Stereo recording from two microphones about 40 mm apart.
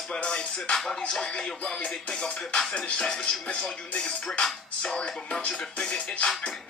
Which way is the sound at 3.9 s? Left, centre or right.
Left.